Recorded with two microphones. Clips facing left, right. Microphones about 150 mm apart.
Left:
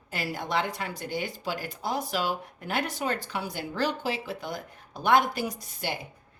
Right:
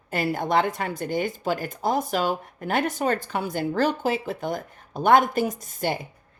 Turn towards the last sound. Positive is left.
turn(degrees=-45)  # may be behind; listen again after turning